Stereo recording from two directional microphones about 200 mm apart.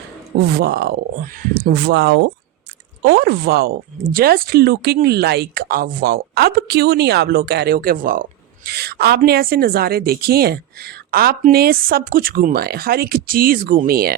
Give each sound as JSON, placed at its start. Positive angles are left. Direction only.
{"t": 0.6, "sound": "speech", "side_deg": -55}